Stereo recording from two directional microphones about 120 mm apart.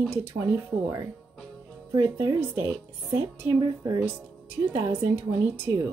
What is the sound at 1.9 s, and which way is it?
A woman's voice, 25° right (ahead or behind).